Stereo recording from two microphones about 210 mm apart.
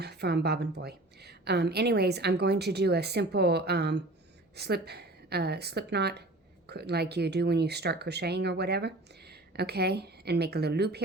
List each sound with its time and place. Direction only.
0.0 s speech: 50° right (ahead or behind)